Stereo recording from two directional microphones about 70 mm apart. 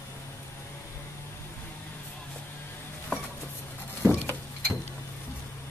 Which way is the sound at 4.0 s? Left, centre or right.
Right.